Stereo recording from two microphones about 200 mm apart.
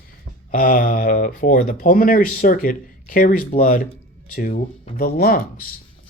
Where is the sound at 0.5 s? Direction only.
45° left (ahead or behind).